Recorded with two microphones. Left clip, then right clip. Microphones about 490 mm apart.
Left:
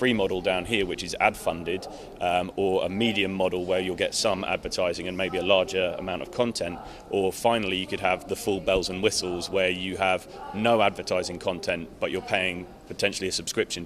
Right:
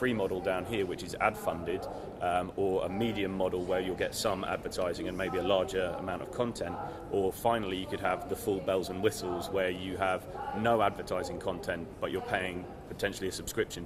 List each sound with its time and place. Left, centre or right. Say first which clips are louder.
0.0 s speech: left 7 dB; left